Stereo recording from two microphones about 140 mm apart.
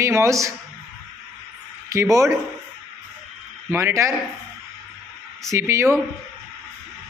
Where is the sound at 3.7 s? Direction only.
15° right (ahead or behind).